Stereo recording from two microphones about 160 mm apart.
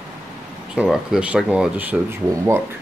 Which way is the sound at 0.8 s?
5° right (ahead or behind).